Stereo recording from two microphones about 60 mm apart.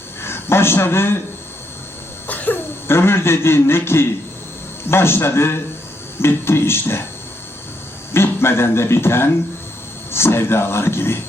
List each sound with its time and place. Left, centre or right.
0.2 s speech: left
2.2 s cough: left
2.8 s a man's voice: left
8.1 s a man's voice: left